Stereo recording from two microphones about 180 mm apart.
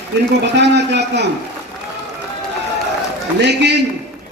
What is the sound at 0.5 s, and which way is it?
Speech, 70° right (ahead or behind).